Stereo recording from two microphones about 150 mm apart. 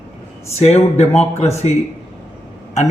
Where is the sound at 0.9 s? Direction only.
45° left (ahead or behind).